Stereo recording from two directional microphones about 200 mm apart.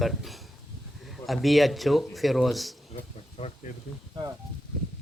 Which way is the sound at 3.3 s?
35° left (ahead or behind).